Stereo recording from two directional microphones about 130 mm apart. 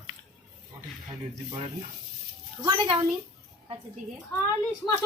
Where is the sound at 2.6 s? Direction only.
40° right (ahead or behind).